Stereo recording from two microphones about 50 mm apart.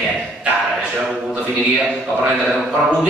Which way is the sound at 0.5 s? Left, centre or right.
Right.